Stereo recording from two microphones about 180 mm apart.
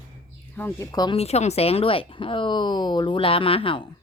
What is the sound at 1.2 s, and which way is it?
Speech, 35° left (ahead or behind).